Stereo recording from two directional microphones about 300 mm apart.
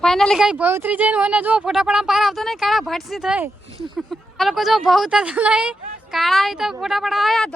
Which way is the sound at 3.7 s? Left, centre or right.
Centre.